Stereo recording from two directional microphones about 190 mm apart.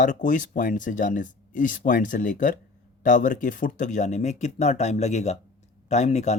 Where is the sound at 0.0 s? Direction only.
45° left (ahead or behind).